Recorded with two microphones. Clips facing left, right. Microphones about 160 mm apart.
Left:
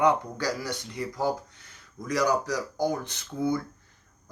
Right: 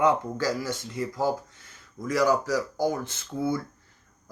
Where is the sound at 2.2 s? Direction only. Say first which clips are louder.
Right 2 dB; 45° right (ahead or behind).